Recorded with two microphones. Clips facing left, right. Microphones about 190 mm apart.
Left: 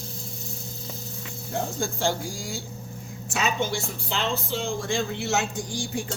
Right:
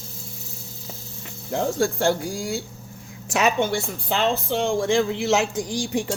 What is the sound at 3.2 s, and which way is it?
A woman's voice, 70° right (ahead or behind).